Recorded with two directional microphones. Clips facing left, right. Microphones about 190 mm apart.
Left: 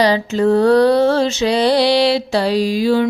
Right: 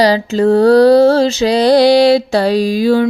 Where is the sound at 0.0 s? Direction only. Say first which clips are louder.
Right 3 dB; 35° right (ahead or behind).